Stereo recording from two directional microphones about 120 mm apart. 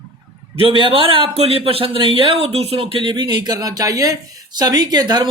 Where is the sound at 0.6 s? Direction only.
45° right (ahead or behind).